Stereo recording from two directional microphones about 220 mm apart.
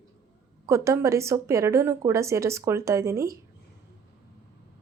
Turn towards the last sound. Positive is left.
turn(degrees=-15)  # may be behind; listen again after turning